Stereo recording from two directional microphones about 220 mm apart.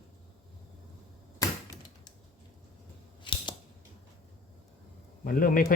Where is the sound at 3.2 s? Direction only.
20° left (ahead or behind).